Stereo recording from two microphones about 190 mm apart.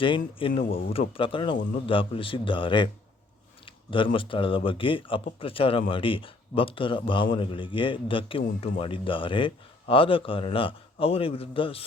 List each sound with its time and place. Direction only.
0.0 s a man's voice: 25° left (ahead or behind)